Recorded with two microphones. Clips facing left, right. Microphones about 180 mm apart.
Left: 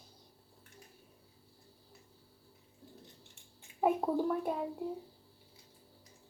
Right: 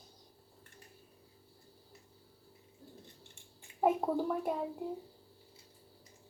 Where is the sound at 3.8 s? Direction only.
Centre (ahead or behind).